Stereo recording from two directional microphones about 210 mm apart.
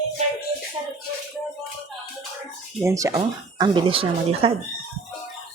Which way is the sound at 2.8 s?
15° right (ahead or behind).